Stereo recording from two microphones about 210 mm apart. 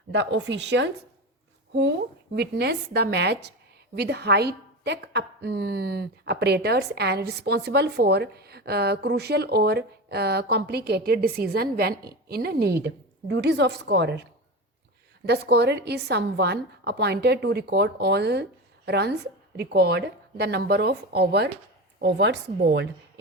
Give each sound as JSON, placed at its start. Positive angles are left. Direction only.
{"t": 0.1, "sound": "speech", "side_deg": -60}
{"t": 2.3, "sound": "a woman's voice", "side_deg": -50}
{"t": 15.3, "sound": "a woman's voice", "side_deg": -50}